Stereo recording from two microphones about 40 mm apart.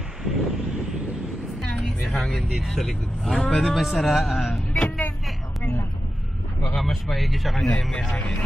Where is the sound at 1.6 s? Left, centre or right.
Centre.